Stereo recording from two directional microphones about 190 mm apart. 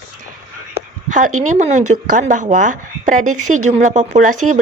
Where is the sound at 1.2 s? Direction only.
40° right (ahead or behind).